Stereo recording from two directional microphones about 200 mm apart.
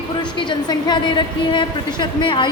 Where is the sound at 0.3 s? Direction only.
20° left (ahead or behind).